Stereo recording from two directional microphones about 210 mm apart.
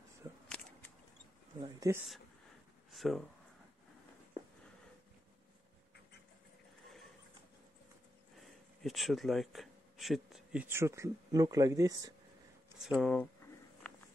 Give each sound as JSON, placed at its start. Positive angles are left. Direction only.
{"t": 1.6, "sound": "speech", "side_deg": -15}
{"t": 2.9, "sound": "speech", "side_deg": 0}
{"t": 8.8, "sound": "speech", "side_deg": 0}
{"t": 12.8, "sound": "speech", "side_deg": 0}